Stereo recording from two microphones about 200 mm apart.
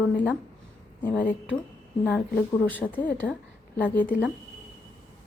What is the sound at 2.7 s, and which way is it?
A woman's voice, 10° left (ahead or behind).